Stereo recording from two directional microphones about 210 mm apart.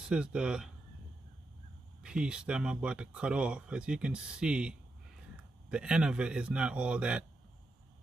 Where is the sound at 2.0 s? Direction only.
5° right (ahead or behind).